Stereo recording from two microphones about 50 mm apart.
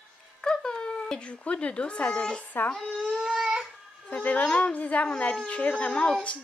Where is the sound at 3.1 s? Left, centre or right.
Centre.